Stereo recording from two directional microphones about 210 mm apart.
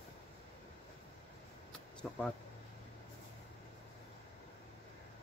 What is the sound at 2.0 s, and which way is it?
Speech, centre (ahead or behind).